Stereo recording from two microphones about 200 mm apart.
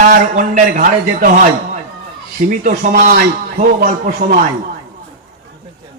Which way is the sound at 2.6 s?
40° right (ahead or behind).